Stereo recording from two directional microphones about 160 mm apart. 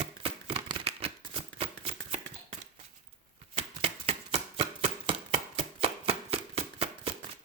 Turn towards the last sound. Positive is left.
turn(degrees=-40)  # may be behind; listen again after turning